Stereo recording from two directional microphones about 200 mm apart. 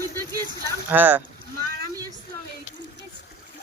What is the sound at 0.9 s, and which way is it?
Speech, 10° right (ahead or behind).